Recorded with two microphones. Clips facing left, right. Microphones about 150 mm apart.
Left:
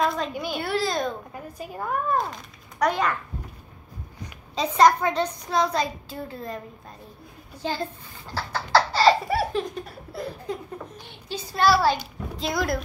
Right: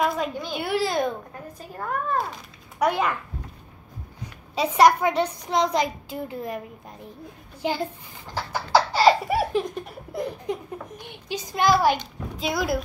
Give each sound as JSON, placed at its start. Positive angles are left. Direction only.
{"t": 0.0, "sound": "a sound", "side_deg": -5}
{"t": 0.3, "sound": "a woman's voice", "side_deg": 10}
{"t": 0.6, "sound": "a woman's voice", "side_deg": -10}
{"t": 1.3, "sound": "a woman's voice", "side_deg": 10}
{"t": 2.8, "sound": "a woman's voice", "side_deg": -10}
{"t": 4.6, "sound": "a woman's voice", "side_deg": -10}
{"t": 7.6, "sound": "a woman's voice", "side_deg": -15}
{"t": 8.7, "sound": "laughter", "side_deg": -10}
{"t": 10.1, "sound": "a woman's voice", "side_deg": -15}
{"t": 12.4, "sound": "speech", "side_deg": -5}